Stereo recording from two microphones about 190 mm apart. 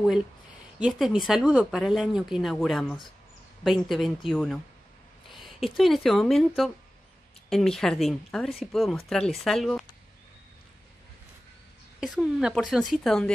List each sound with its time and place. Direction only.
0.7 s speech: 5° right (ahead or behind)
12.0 s speech: 5° right (ahead or behind)